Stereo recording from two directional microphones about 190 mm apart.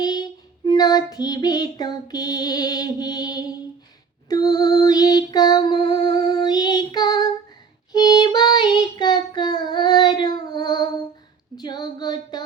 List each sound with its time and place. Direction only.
0.0 s child singing: 20° left (ahead or behind)
4.3 s music: 20° left (ahead or behind)
7.9 s child singing: 20° left (ahead or behind)